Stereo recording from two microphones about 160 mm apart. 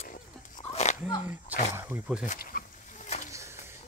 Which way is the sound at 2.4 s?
60° left (ahead or behind).